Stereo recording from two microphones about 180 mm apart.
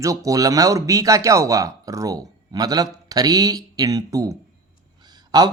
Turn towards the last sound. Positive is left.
turn(degrees=-25)  # may be behind; listen again after turning